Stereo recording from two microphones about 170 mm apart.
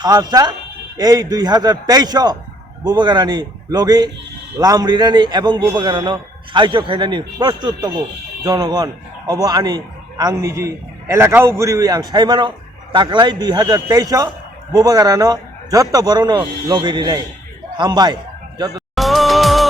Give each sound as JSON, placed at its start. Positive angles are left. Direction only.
{"t": 0.0, "sound": "a man's voice", "side_deg": -25}
{"t": 18.9, "sound": "music", "side_deg": 0}